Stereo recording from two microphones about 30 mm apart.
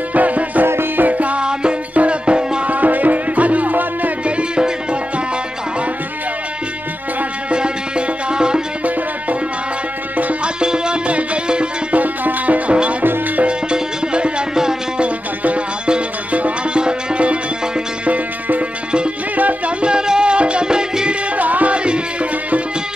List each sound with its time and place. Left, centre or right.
0.1 s music: right
1.4 s music: right
2.6 s music: right
7.5 s music: right
10.4 s music: right
11.9 s music: right
14.5 s music: centre
16.3 s music: right
16.7 s music: right
18.0 s music: right
19.8 s music: right
20.6 s music: right
21.4 s music: right
21.7 s music: right